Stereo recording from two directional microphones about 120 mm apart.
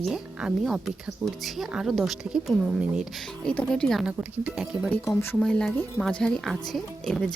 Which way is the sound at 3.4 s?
10° left (ahead or behind).